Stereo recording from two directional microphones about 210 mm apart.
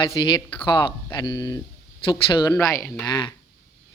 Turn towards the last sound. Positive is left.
turn(degrees=10)  # may be behind; listen again after turning